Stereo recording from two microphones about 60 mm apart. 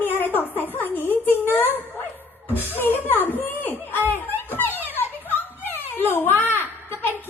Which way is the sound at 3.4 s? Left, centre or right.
Left.